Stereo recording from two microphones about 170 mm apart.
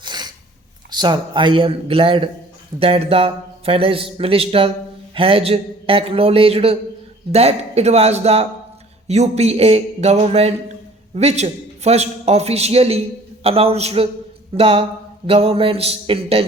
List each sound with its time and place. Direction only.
0.0 s sneeze: 25° right (ahead or behind)
0.9 s a man's voice: 25° right (ahead or behind)